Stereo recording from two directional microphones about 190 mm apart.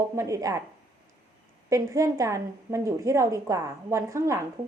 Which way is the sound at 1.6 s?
15° right (ahead or behind).